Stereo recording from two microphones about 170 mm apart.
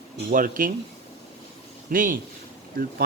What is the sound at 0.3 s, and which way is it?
Speech, 55° right (ahead or behind).